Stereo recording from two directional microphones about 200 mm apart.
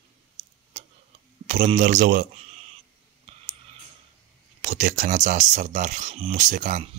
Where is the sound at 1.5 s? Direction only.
35° right (ahead or behind).